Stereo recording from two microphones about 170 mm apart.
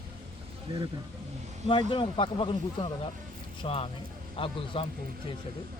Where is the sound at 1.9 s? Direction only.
30° left (ahead or behind).